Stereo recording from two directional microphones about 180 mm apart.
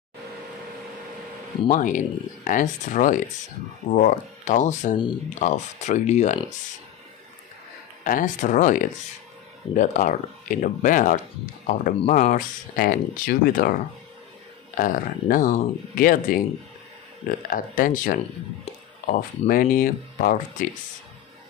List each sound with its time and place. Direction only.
1.7 s speech: 45° left (ahead or behind)
8.0 s speech: 45° left (ahead or behind)
14.8 s speech: 50° left (ahead or behind)
17.5 s speech: 50° left (ahead or behind)